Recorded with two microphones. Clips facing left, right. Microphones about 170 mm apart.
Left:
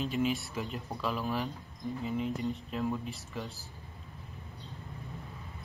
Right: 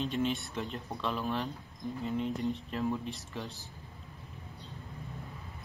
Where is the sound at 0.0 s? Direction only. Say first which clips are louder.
Left 1 dB; 5° left (ahead or behind).